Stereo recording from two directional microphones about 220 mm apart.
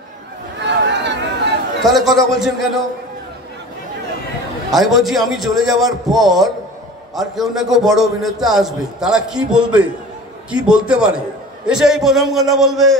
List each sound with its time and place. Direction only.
0.7 s a sound: 50° right (ahead or behind)
1.8 s a man's voice: centre (ahead or behind)
4.6 s a man's voice: centre (ahead or behind)